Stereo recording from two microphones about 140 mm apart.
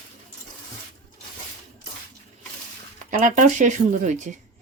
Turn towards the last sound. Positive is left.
turn(degrees=-60)  # may be behind; listen again after turning